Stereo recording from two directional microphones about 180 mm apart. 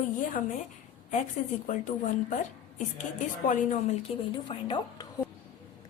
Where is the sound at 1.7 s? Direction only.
45° left (ahead or behind).